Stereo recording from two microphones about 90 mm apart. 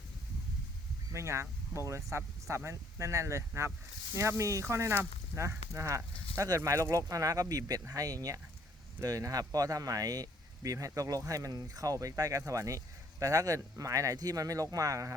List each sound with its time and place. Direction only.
1.1 s speech: 35° right (ahead or behind)